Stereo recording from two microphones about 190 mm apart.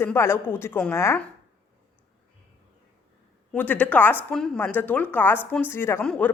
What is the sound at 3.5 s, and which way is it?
Speech, 10° left (ahead or behind).